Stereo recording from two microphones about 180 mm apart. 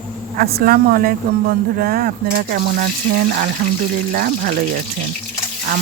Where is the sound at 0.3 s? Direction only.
55° right (ahead or behind).